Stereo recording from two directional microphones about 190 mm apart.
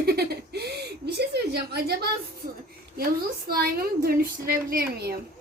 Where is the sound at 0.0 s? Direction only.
55° right (ahead or behind).